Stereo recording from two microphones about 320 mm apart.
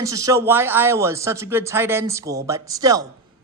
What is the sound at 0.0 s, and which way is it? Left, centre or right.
A woman's voice, centre.